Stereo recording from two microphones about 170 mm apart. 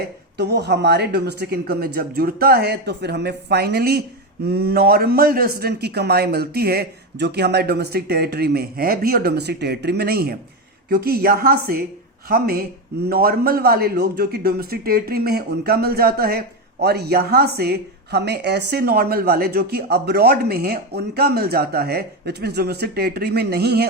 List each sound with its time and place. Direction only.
0.0 s a woman's voice: 75° right (ahead or behind)